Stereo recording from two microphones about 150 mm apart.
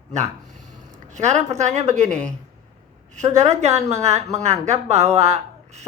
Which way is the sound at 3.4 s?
45° right (ahead or behind).